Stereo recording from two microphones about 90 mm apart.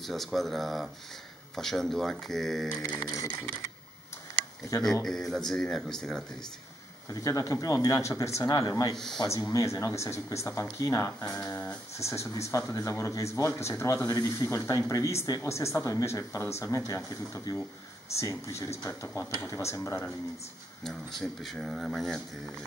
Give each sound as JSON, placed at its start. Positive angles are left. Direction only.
{"t": 0.0, "sound": "speech", "side_deg": 0}
{"t": 2.9, "sound": "speech", "side_deg": 45}
{"t": 5.0, "sound": "speech", "side_deg": 5}
{"t": 7.1, "sound": "speech", "side_deg": 40}
{"t": 8.9, "sound": "speech", "side_deg": 5}
{"t": 9.3, "sound": "speech", "side_deg": 35}
{"t": 11.3, "sound": "speech", "side_deg": 30}
{"t": 20.8, "sound": "speech", "side_deg": 5}